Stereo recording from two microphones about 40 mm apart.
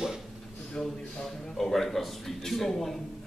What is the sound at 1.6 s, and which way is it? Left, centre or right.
A man's voice, centre.